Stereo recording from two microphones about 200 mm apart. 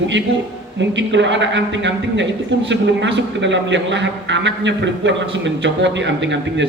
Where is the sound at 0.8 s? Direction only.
65° right (ahead or behind).